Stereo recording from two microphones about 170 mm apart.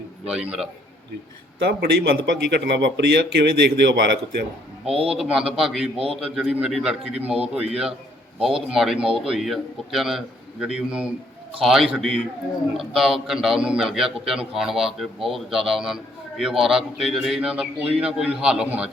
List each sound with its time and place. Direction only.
0.3 s a man's voice: 5° right (ahead or behind)
1.5 s a man's voice: 75° right (ahead or behind)
5.1 s a man's voice: 5° right (ahead or behind)